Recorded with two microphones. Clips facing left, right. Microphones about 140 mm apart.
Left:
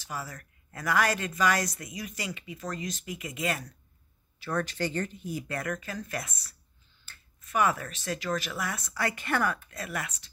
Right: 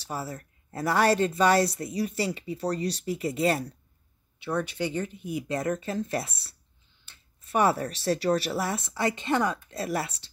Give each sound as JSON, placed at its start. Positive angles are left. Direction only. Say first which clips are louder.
{"t": 0.0, "sound": "speech", "louder": "right 4 dB", "side_deg": -30}
{"t": 4.5, "sound": "speech", "louder": "right 2 dB", "side_deg": -10}
{"t": 5.6, "sound": "speech", "louder": "right 6 dB", "side_deg": -30}